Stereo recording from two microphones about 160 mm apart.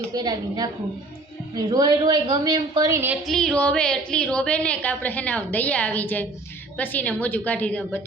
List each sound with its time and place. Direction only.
0.1 s a woman's voice: 25° right (ahead or behind)
3.2 s a woman's voice: 5° left (ahead or behind)